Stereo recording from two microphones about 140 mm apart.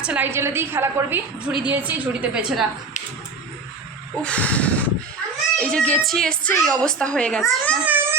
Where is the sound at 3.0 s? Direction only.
60° left (ahead or behind).